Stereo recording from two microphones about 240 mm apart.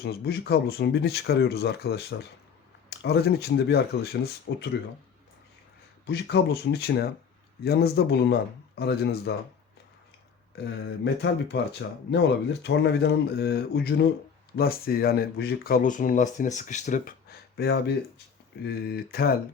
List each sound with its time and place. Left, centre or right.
0.0 s speech: left
6.1 s speech: left
11.0 s speech: left